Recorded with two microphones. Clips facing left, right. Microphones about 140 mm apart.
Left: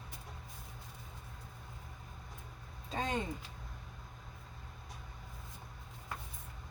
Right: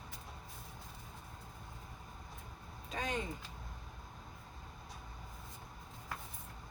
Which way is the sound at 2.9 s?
30° left (ahead or behind).